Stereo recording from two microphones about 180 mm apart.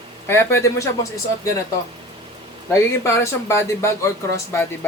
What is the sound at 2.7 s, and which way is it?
Speech, 15° left (ahead or behind).